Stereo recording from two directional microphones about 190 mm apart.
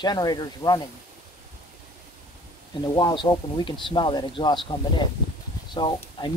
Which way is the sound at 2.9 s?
25° left (ahead or behind).